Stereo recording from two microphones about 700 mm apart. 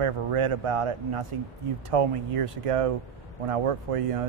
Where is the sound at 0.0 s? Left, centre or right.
Right.